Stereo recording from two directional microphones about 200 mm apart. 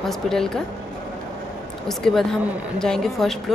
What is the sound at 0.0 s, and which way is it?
Speech, centre (ahead or behind).